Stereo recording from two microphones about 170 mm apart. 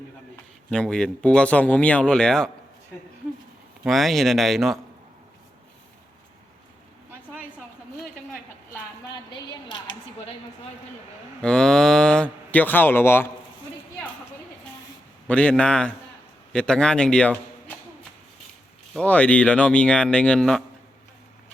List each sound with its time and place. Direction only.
0.7 s speech: 5° left (ahead or behind)
3.8 s speech: centre (ahead or behind)
9.3 s a sound: 25° left (ahead or behind)
11.4 s cattle: 5° left (ahead or behind)
15.3 s cattle: 5° left (ahead or behind)
16.5 s a man's voice: 5° left (ahead or behind)
18.9 s cattle: 10° left (ahead or behind)